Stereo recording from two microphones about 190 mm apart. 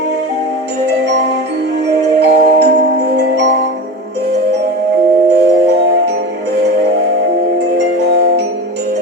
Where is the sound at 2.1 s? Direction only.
60° right (ahead or behind).